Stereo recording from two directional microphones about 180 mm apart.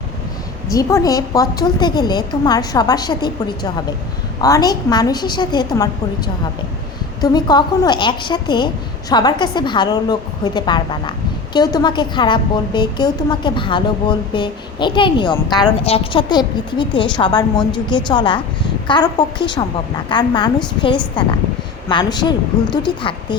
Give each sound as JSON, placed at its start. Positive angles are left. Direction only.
{"t": 0.7, "sound": "a woman's voice", "side_deg": 20}
{"t": 21.8, "sound": "a woman's voice", "side_deg": 25}